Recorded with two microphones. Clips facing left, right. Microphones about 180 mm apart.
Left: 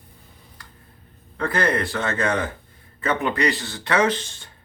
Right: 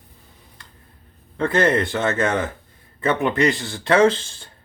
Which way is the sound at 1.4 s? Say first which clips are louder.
Right 4 dB; 25° right (ahead or behind).